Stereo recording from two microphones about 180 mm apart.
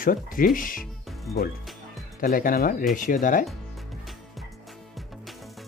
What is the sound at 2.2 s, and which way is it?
Speech, 50° left (ahead or behind).